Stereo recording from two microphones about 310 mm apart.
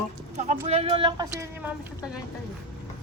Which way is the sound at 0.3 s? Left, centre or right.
Right.